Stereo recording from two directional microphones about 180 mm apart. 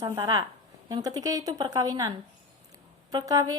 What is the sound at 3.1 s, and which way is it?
Speech, 20° right (ahead or behind).